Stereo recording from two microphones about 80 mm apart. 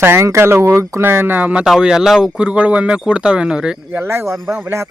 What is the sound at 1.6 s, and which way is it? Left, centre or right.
Speech, centre.